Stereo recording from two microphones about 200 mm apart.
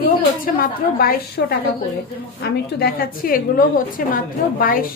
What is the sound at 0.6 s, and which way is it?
A woman's voice, 50° left (ahead or behind).